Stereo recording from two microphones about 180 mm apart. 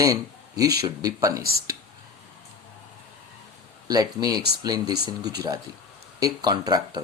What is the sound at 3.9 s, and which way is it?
Speech, 20° right (ahead or behind).